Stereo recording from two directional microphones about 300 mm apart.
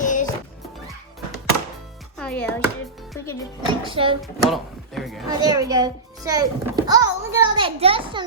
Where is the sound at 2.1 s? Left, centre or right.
Centre.